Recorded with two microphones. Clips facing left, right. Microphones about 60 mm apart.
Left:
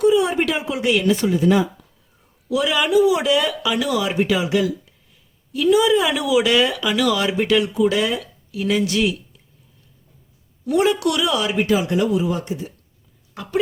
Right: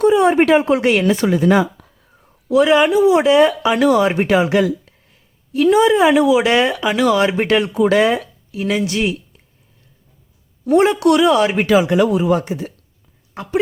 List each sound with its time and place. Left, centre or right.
0.0 s speech: right
2.5 s speech: right
5.5 s speech: right
7.7 s speech: right
8.5 s speech: right
10.7 s speech: right
11.6 s speech: right